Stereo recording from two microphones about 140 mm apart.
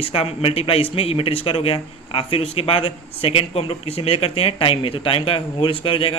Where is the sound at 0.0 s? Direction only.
40° left (ahead or behind).